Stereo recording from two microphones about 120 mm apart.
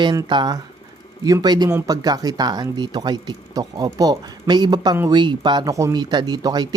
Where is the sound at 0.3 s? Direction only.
35° right (ahead or behind).